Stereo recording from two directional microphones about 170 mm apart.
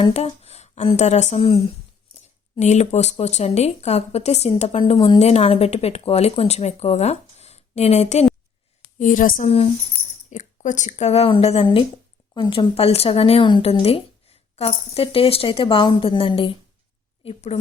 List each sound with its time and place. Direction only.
0.0 s speech: 35° left (ahead or behind)
9.0 s speech: 50° left (ahead or behind)